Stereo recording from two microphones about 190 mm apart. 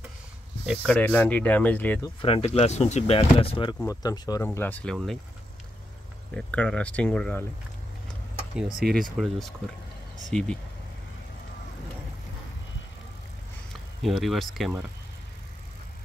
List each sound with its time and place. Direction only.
0.7 s speech: 5° left (ahead or behind)
2.2 s speech: 30° left (ahead or behind)
4.5 s speech: 10° left (ahead or behind)
6.3 s speech: 5° left (ahead or behind)
8.7 s speech: centre (ahead or behind)
14.0 s speech: centre (ahead or behind)